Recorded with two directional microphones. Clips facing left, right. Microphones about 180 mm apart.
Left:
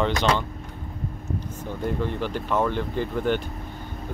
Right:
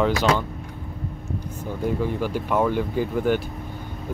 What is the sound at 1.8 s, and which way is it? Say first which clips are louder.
Speech: right 3 dB; 10° right (ahead or behind).